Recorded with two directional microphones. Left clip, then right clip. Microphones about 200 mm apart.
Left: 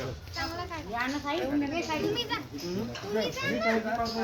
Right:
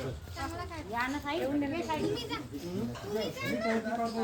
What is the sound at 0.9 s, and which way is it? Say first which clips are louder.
Speech: left 2 dB; 50° left (ahead or behind).